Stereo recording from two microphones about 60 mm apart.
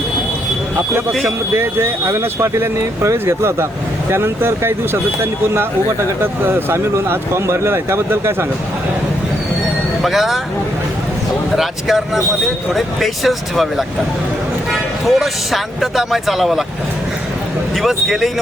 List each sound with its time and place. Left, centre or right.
0.8 s speech: right
6.4 s speech: right
10.0 s speech: centre
11.5 s speech: centre
17.8 s speech: centre